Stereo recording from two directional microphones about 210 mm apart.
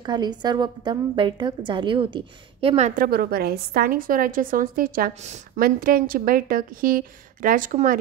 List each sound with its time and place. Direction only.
0.0 s a woman's voice: 20° right (ahead or behind)
3.0 s a woman's voice: 45° right (ahead or behind)